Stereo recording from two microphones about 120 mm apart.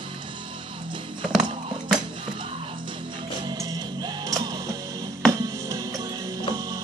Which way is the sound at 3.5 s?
35° right (ahead or behind).